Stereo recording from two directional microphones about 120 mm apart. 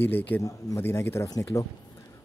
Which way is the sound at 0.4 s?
25° left (ahead or behind).